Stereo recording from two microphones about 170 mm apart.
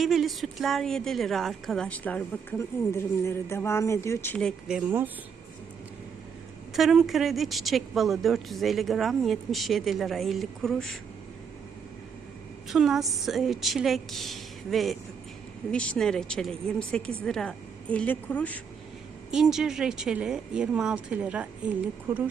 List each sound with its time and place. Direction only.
0.0 s a woman's voice: centre (ahead or behind)
4.7 s speech: 10° right (ahead or behind)
6.7 s a woman's voice: centre (ahead or behind)
12.6 s a woman's voice: centre (ahead or behind)
19.3 s a woman's voice: 5° right (ahead or behind)